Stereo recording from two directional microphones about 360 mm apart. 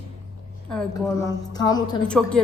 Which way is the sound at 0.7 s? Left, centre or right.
Centre.